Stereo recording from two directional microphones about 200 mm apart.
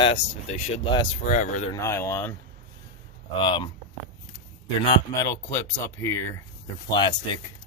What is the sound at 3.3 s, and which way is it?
Speech, 25° left (ahead or behind).